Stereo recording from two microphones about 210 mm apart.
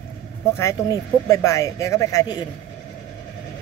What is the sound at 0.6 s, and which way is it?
Speech, 15° left (ahead or behind).